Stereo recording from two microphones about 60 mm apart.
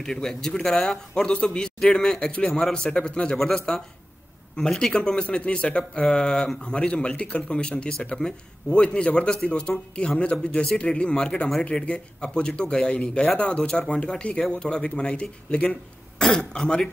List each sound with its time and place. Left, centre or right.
0.0 s a man's voice: centre